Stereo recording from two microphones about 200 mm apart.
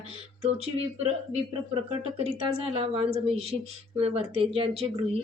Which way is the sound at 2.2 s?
30° right (ahead or behind).